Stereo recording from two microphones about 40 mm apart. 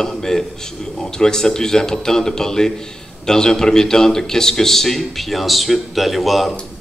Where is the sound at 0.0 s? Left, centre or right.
Centre.